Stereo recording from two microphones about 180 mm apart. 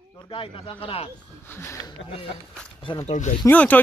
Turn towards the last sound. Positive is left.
turn(degrees=10)  # may be behind; listen again after turning